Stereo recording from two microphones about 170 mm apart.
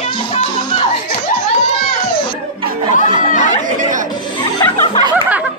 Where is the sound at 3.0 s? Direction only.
50° left (ahead or behind).